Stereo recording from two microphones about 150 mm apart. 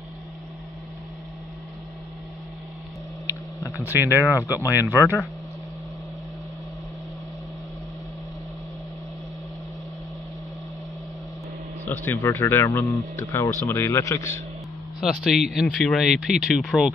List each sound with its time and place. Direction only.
3.7 s speech: 15° right (ahead or behind)
11.8 s speech: 15° left (ahead or behind)
15.0 s speech: centre (ahead or behind)